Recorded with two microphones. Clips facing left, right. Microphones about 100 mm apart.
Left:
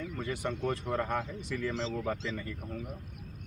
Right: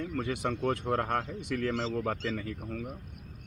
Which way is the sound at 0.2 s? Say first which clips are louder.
Right 3 dB; 85° right.